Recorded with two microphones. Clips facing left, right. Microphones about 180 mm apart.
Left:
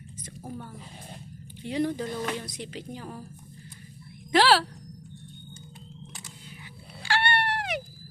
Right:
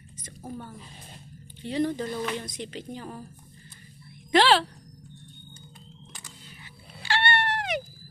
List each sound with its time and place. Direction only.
1.6 s speech: 10° left (ahead or behind)
4.3 s speech: 5° left (ahead or behind)
7.0 s dog: 10° left (ahead or behind)